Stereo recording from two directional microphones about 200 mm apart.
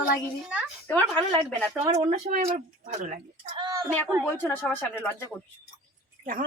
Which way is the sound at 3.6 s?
15° right (ahead or behind).